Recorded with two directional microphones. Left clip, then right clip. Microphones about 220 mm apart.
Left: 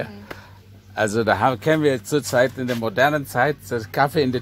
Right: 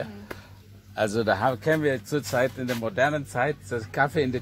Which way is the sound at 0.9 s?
20° left (ahead or behind).